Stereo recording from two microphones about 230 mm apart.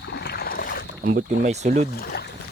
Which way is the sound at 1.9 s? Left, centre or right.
Left.